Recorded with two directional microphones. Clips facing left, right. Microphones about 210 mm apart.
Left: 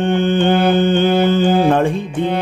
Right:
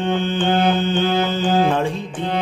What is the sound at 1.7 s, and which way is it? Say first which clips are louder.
Music: left 6 dB; 55° left (ahead or behind).